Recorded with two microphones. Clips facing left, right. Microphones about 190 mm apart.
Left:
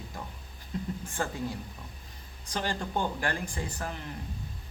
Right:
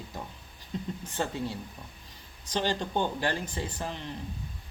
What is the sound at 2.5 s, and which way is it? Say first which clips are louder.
Speech: right 3 dB; 25° right (ahead or behind).